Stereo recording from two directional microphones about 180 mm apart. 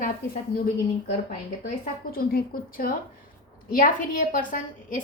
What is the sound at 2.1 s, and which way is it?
A woman's voice, 55° left (ahead or behind).